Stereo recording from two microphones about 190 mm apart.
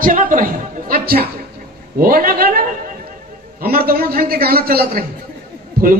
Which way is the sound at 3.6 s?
55° right (ahead or behind).